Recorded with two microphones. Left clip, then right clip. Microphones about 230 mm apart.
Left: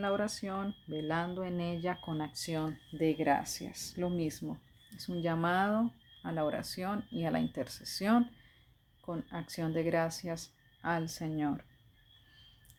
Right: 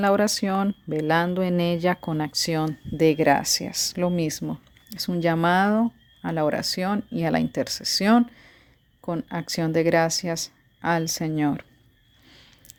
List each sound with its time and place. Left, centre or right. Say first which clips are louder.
0.0 s speech: right 13 dB; right